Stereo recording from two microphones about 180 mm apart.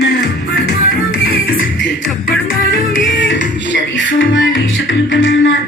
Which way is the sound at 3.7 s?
90° left.